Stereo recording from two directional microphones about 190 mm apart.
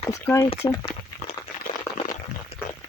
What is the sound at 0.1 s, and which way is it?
Speech, 15° left (ahead or behind).